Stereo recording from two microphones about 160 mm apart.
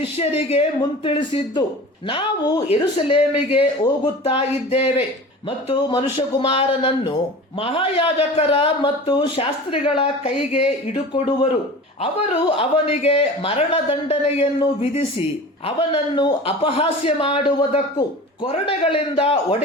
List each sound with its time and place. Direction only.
0.0 s a man's voice: 40° left (ahead or behind)
12.5 s a man's voice: 40° left (ahead or behind)